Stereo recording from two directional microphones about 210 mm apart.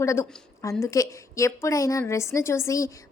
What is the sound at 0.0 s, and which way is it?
Speech, 15° left (ahead or behind).